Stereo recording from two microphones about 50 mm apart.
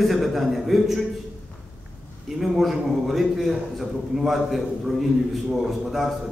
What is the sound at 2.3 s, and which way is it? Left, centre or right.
A man's voice, centre.